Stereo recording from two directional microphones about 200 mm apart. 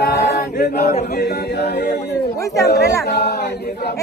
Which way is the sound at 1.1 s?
50° left (ahead or behind).